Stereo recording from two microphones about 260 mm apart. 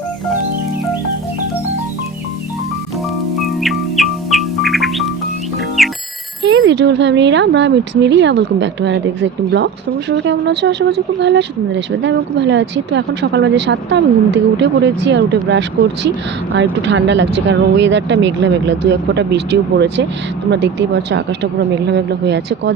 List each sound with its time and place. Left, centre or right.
3.6 s music: centre
6.5 s speech: right